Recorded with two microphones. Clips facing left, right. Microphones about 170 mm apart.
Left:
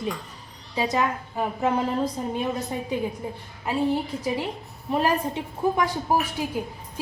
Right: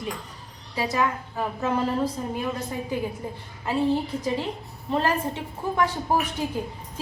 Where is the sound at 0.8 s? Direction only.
20° left (ahead or behind).